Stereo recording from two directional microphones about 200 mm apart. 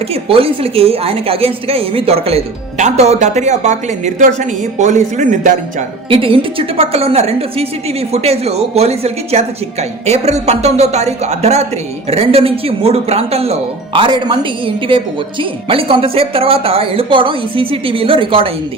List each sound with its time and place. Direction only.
0.1 s a woman's voice: 30° right (ahead or behind)
6.1 s a woman's voice: 25° right (ahead or behind)